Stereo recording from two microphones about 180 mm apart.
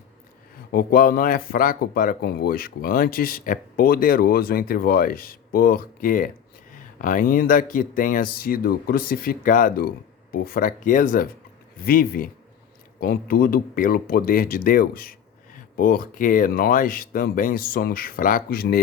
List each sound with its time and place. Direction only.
0.7 s speech: 55° left (ahead or behind)